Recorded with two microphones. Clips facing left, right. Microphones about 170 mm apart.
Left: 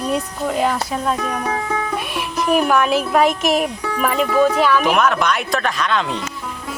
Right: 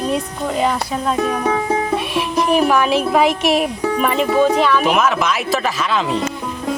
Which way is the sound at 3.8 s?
25° right (ahead or behind).